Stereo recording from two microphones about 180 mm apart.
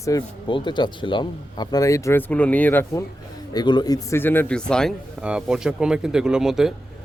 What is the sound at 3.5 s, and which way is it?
Speech, 25° left (ahead or behind).